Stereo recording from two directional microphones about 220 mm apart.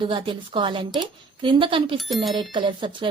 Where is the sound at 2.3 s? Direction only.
20° right (ahead or behind).